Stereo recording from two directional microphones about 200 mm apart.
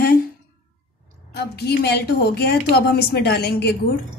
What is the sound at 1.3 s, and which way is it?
A woman's voice, 55° left (ahead or behind).